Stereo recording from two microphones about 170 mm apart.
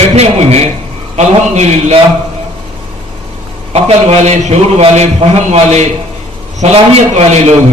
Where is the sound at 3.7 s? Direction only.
40° right (ahead or behind).